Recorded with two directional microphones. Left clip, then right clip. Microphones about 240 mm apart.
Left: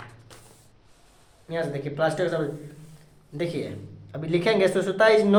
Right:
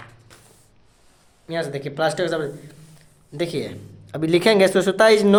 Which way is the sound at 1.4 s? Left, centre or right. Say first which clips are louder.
Right 3 dB; right.